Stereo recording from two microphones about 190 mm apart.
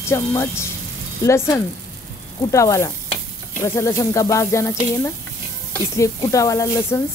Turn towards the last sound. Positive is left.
turn(degrees=15)  # may be behind; listen again after turning